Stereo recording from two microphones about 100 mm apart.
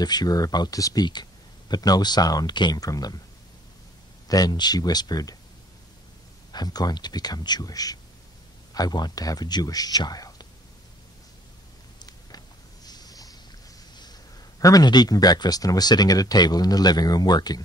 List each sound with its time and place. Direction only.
0.0 s speech: 40° left (ahead or behind)
4.3 s speech: 40° left (ahead or behind)
6.5 s speech: 40° left (ahead or behind)
12.0 s a sound: 40° left (ahead or behind)
14.6 s speech: 40° left (ahead or behind)